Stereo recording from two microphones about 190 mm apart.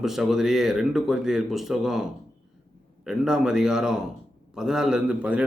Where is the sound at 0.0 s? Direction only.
Centre (ahead or behind).